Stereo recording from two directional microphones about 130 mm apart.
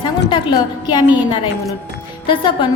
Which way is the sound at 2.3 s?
40° left (ahead or behind).